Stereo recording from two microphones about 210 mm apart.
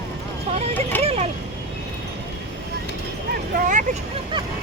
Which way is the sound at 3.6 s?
35° right (ahead or behind).